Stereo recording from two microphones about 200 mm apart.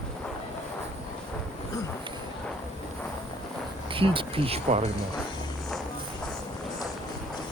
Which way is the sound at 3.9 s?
25° right (ahead or behind).